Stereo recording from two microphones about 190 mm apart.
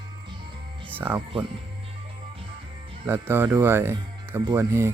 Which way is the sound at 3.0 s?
10° right (ahead or behind).